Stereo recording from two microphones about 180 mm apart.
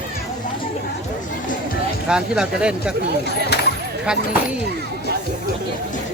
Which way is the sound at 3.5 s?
70° left (ahead or behind).